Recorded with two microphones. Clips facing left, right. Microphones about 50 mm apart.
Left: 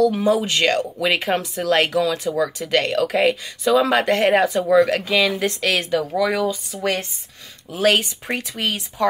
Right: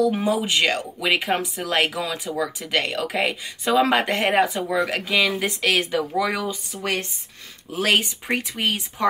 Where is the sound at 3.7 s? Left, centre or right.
Right.